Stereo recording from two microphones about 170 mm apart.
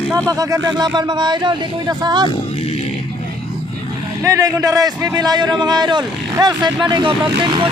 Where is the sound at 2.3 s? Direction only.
35° left (ahead or behind).